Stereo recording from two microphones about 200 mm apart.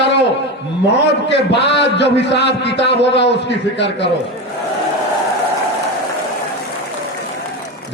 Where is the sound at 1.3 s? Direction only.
60° left (ahead or behind).